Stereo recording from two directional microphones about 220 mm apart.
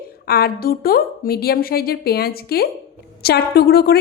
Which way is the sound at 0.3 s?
45° left (ahead or behind).